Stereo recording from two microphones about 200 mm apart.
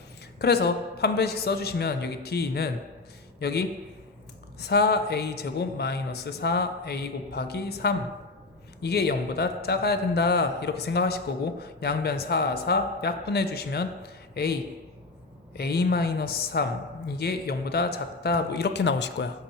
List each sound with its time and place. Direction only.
0.3 s speech: 55° left (ahead or behind)
15.5 s speech: 55° left (ahead or behind)